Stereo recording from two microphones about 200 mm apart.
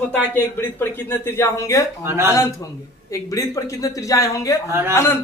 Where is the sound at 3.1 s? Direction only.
15° left (ahead or behind).